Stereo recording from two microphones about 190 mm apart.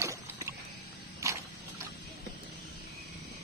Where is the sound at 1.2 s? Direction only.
15° right (ahead or behind).